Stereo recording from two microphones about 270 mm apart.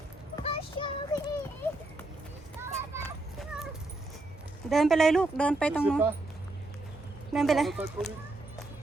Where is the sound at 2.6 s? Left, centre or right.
Centre.